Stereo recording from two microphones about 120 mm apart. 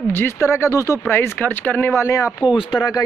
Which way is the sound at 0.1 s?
20° left (ahead or behind).